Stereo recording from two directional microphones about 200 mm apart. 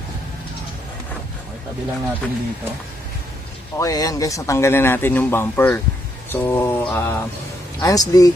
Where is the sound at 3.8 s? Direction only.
15° left (ahead or behind).